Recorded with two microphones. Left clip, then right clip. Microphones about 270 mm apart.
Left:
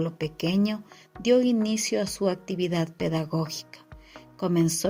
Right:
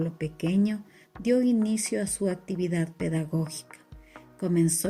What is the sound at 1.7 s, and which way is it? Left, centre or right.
Speech, left.